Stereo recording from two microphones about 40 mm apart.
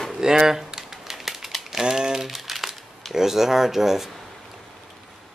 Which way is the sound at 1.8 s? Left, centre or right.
Centre.